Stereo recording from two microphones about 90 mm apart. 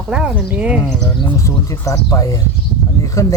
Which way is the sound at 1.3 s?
35° left (ahead or behind).